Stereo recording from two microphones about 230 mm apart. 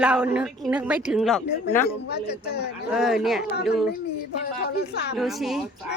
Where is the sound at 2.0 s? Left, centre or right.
Left.